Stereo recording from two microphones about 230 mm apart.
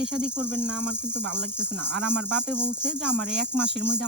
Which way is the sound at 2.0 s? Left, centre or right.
Right.